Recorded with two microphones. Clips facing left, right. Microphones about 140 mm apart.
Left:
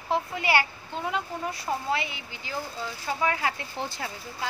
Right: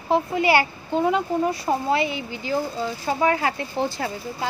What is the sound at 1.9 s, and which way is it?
Speech, 35° right (ahead or behind).